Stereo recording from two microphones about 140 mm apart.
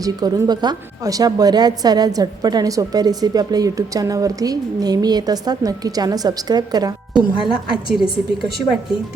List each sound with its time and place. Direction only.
0.0 s a woman's voice: 25° right (ahead or behind)
7.1 s a woman's voice: 5° right (ahead or behind)